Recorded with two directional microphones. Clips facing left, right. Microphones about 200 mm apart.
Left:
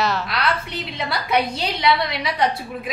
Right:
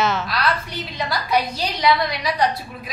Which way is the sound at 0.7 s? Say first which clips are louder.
Even; 25° left (ahead or behind).